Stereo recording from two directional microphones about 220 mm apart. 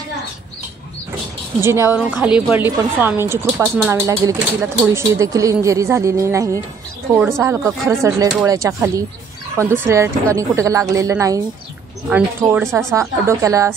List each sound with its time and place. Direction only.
1.6 s a woman's voice: 10° right (ahead or behind)
13.3 s a woman's voice: 15° right (ahead or behind)